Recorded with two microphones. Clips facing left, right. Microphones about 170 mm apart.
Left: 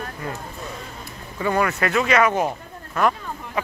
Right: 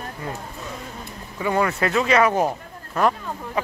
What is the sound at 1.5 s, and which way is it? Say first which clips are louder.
A man's voice: right 1 dB; 30° right (ahead or behind).